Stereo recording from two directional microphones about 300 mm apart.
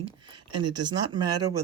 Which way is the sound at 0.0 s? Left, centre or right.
Centre.